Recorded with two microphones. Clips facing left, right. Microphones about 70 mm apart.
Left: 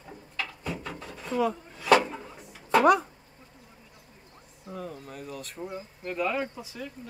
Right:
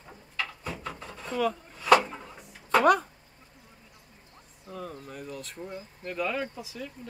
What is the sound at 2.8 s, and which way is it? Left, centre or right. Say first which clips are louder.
Speech: left 1 dB; right.